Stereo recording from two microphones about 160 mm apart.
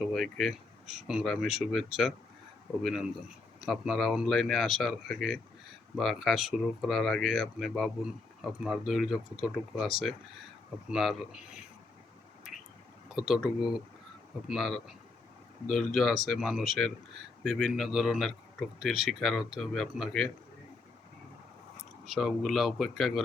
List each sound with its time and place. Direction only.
0.0 s speech: centre (ahead or behind)
13.1 s speech: centre (ahead or behind)
22.0 s speech: centre (ahead or behind)